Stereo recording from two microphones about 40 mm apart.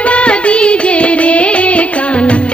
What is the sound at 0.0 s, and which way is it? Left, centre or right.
Music, left.